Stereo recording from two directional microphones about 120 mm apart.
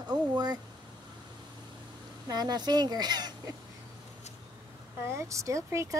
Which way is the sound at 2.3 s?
35° right (ahead or behind).